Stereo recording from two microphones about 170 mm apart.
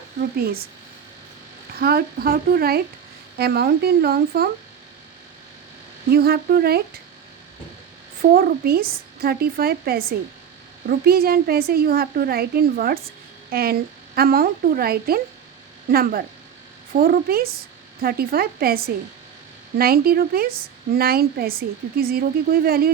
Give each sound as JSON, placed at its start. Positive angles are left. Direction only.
{"t": 0.2, "sound": "a woman's voice", "side_deg": -60}
{"t": 1.8, "sound": "a woman's voice", "side_deg": -65}
{"t": 6.1, "sound": "a woman's voice", "side_deg": -65}
{"t": 8.2, "sound": "a woman's voice", "side_deg": -60}